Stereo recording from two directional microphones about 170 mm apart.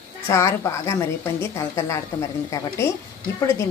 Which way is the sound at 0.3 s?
15° left (ahead or behind).